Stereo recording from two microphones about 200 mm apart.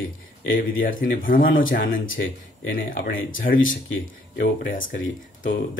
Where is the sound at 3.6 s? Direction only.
75° left (ahead or behind).